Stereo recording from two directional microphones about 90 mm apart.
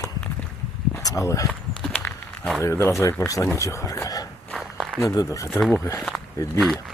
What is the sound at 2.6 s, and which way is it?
Speech, 35° left (ahead or behind).